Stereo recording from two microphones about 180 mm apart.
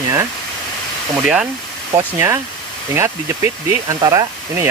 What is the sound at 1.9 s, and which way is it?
Speech, 20° right (ahead or behind).